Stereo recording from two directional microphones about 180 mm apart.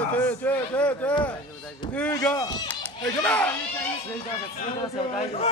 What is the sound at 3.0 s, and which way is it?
Speech, 5° left (ahead or behind).